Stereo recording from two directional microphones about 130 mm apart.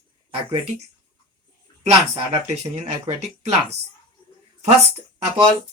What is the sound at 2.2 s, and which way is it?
Speech, 55° right (ahead or behind).